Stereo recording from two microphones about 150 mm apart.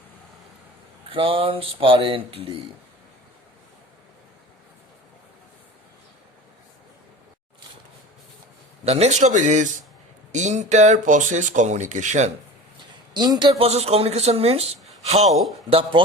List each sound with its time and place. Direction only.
1.1 s speech: 35° right (ahead or behind)
8.8 s speech: 45° right (ahead or behind)
13.1 s speech: 30° right (ahead or behind)
13.6 s speech: 40° right (ahead or behind)